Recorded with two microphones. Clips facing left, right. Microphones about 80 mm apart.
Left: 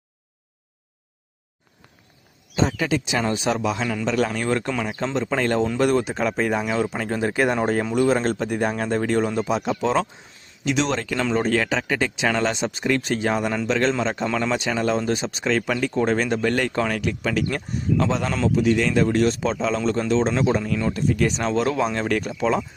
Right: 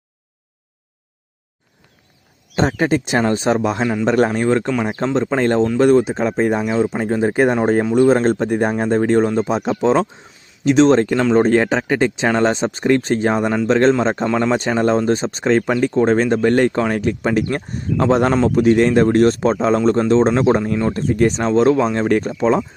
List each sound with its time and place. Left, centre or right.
2.6 s speech: right
4.3 s speech: right
8.7 s speech: right
14.3 s speech: right
14.6 s speech: right